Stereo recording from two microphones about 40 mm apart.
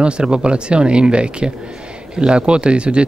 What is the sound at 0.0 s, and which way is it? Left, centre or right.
Speech, right.